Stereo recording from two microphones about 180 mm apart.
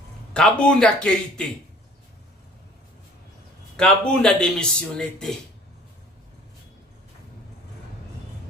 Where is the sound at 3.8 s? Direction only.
5° left (ahead or behind).